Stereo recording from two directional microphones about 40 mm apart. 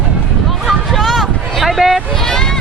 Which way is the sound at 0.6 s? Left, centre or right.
Centre.